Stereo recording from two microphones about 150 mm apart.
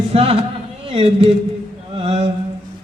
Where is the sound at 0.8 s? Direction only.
40° right (ahead or behind).